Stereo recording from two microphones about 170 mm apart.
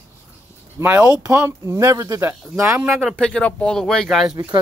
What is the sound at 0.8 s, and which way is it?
Speech, 15° right (ahead or behind).